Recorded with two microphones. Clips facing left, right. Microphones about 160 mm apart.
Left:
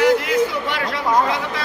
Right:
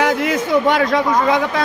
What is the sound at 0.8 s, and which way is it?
Speech, 45° right (ahead or behind).